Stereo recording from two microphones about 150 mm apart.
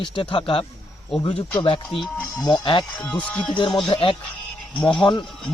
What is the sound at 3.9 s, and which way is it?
Speech, 35° left (ahead or behind).